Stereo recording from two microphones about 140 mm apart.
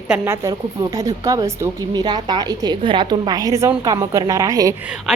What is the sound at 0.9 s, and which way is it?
A woman's voice, 25° right (ahead or behind).